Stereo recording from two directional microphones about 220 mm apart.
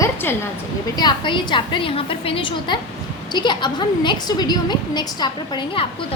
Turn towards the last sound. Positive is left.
turn(degrees=20)  # may be behind; listen again after turning